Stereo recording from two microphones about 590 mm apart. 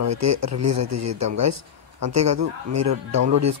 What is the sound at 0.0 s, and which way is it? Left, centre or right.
Speech, right.